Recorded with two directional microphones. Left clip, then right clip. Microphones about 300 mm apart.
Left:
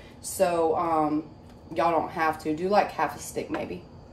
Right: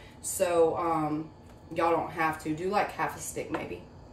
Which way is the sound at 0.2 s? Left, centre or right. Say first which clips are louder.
Left 1 dB; centre.